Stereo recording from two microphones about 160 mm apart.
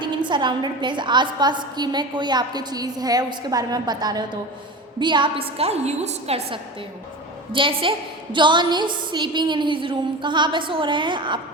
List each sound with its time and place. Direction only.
0.0 s a woman's voice: 30° right (ahead or behind)